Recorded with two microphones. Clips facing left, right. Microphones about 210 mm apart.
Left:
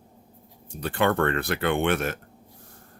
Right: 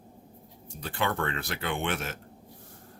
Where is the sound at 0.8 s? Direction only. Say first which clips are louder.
Left 7 dB; 55° left (ahead or behind).